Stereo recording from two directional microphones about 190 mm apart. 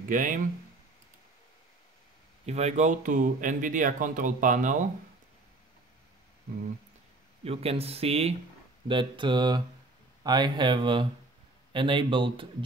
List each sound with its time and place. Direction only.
0.1 s speech: 45° right (ahead or behind)
2.4 s speech: 35° right (ahead or behind)
7.4 s speech: 30° right (ahead or behind)